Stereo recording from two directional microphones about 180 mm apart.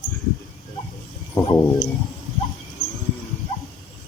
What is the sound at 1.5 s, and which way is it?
Speech, 20° left (ahead or behind).